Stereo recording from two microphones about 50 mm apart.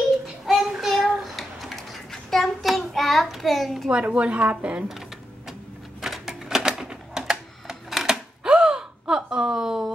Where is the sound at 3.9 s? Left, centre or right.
Right.